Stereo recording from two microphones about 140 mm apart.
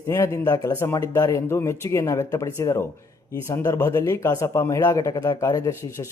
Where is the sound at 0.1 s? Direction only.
25° left (ahead or behind).